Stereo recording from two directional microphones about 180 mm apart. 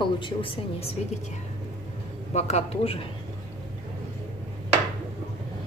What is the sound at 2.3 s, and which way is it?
Speech, 40° left (ahead or behind).